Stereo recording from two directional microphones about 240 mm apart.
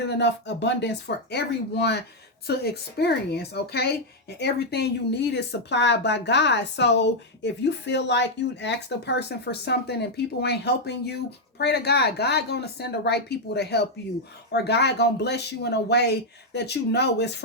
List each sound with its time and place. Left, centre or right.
0.1 s a woman's voice: left